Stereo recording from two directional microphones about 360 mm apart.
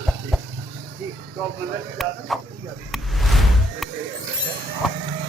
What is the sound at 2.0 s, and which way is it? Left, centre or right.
Speech, centre.